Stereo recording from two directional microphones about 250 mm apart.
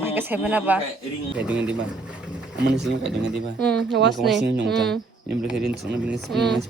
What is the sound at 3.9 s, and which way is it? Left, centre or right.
Speech, right.